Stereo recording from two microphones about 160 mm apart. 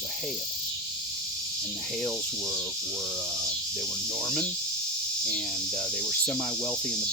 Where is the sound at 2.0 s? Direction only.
5° left (ahead or behind).